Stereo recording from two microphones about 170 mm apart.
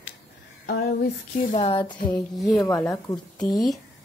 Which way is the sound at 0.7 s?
70° left (ahead or behind).